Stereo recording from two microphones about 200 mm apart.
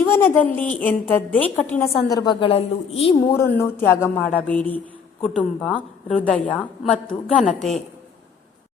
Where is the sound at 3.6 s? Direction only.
10° left (ahead or behind).